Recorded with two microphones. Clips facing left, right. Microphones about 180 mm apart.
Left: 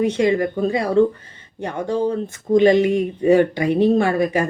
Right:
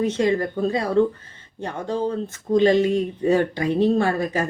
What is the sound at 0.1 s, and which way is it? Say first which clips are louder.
Speech: left 3 dB; 65° left (ahead or behind).